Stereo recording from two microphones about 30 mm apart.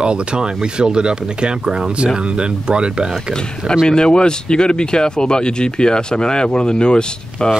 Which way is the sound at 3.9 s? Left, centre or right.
Left.